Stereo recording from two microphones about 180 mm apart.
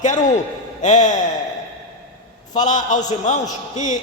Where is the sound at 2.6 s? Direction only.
45° left (ahead or behind).